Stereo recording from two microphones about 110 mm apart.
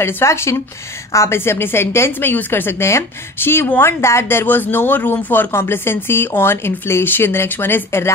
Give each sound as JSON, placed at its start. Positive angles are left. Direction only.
{"t": 0.0, "sound": "a woman's voice", "side_deg": 25}